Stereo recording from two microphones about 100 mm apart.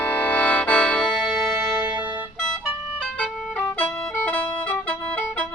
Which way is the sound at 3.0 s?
15° left (ahead or behind).